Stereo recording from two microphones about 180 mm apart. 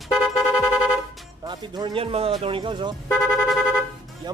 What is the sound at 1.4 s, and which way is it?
Speech, 25° right (ahead or behind).